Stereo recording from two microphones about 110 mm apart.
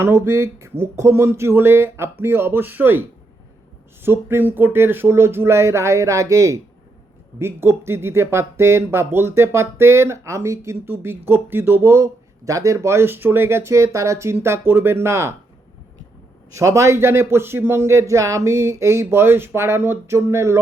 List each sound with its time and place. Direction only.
0.0 s a man's voice: 20° right (ahead or behind)
4.0 s a man's voice: 20° right (ahead or behind)
16.5 s a man's voice: 25° right (ahead or behind)